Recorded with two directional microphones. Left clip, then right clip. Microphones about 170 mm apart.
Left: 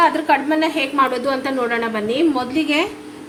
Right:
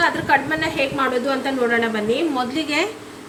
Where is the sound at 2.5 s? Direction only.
20° left (ahead or behind).